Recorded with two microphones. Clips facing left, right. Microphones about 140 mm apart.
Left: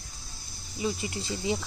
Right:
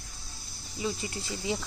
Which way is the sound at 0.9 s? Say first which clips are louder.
Left 3 dB; 15° left (ahead or behind).